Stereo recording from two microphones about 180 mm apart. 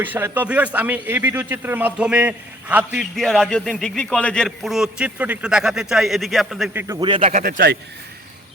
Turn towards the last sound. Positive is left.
turn(degrees=-55)  # may be behind; listen again after turning